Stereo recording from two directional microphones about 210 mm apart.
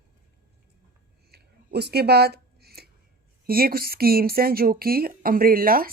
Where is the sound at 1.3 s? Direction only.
50° right (ahead or behind).